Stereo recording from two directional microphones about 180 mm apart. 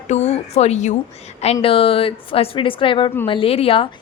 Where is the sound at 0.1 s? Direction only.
40° left (ahead or behind).